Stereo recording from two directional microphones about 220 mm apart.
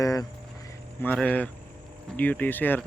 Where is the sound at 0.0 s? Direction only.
15° left (ahead or behind).